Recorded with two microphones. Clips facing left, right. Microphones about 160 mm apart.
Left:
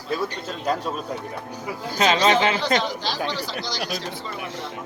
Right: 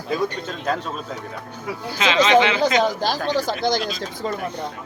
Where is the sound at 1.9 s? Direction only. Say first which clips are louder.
Right 2 dB; 45° left (ahead or behind).